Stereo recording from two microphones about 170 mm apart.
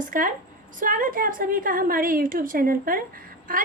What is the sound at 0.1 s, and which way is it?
A woman's voice, 55° right (ahead or behind).